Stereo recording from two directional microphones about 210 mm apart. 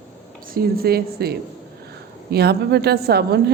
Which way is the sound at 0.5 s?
45° right (ahead or behind).